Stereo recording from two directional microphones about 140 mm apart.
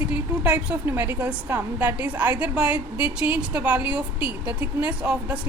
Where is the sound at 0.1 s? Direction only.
10° right (ahead or behind).